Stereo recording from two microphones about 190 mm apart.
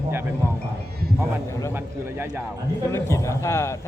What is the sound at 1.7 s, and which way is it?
Speech, 10° right (ahead or behind).